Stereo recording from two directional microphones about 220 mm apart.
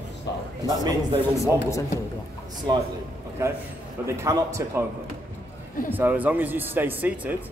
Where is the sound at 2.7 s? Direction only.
20° right (ahead or behind).